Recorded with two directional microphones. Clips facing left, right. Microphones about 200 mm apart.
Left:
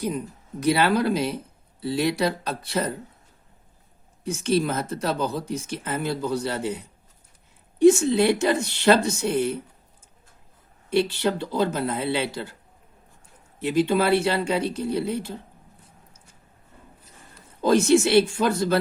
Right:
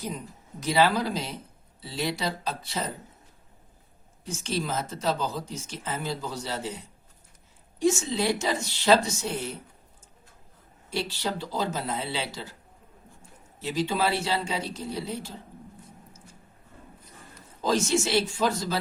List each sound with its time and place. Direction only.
0.6 s speech: 60° left (ahead or behind)
4.2 s speech: 60° left (ahead or behind)
10.8 s speech: 60° left (ahead or behind)
13.6 s speech: 60° left (ahead or behind)
17.6 s speech: 60° left (ahead or behind)